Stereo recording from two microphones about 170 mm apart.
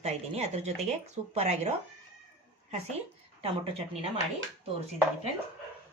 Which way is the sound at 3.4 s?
35° right (ahead or behind).